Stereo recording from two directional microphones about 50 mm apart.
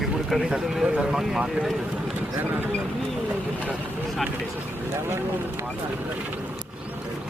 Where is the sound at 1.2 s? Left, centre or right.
Centre.